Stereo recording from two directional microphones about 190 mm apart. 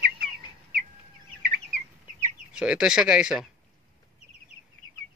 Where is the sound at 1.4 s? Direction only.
55° right (ahead or behind).